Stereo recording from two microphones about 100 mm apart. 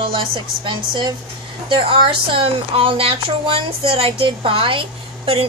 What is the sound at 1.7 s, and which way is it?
A woman's voice, 60° right (ahead or behind).